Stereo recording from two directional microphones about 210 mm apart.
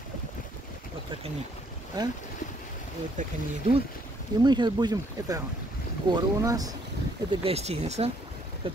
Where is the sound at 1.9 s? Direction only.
20° right (ahead or behind).